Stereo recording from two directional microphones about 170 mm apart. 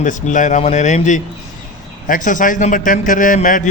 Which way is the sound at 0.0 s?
50° left (ahead or behind).